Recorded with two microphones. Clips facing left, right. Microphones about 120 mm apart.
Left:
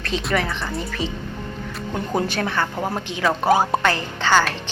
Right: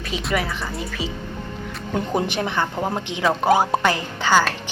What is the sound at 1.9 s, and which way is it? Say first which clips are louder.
A woman's voice: right 1 dB; 20° right (ahead or behind).